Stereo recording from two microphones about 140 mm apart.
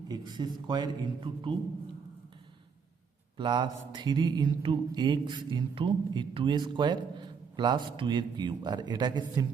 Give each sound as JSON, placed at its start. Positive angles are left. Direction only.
{"t": 0.1, "sound": "mantra", "side_deg": -30}
{"t": 3.3, "sound": "mantra", "side_deg": -35}